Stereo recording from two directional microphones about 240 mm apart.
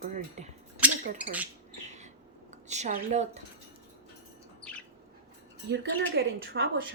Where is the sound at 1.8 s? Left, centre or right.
Right.